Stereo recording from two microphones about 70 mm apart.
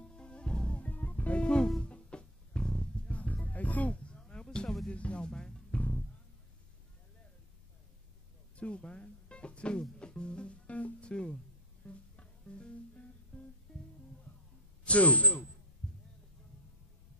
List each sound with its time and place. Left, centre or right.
0.1 s music: centre
5.7 s music: left
8.5 s music: centre
14.9 s speech: centre